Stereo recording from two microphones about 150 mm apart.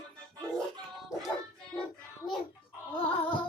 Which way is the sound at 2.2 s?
65° left (ahead or behind).